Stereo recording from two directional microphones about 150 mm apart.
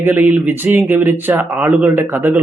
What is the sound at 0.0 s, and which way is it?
Speech, 10° right (ahead or behind).